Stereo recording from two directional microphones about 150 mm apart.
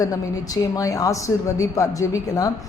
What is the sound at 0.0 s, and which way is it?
A woman's voice, 25° left (ahead or behind).